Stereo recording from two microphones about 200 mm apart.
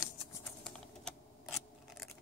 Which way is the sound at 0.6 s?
Centre (ahead or behind).